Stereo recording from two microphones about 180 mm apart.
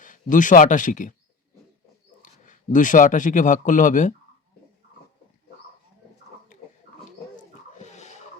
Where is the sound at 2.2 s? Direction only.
45° left (ahead or behind).